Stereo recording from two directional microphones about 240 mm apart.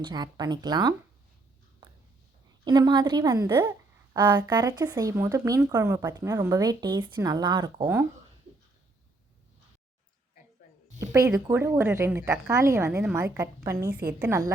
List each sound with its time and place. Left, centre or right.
0.0 s a woman's voice: centre
2.6 s a woman's voice: centre
11.0 s a woman's voice: centre